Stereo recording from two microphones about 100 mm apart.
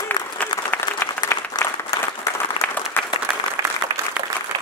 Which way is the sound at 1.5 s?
35° left (ahead or behind).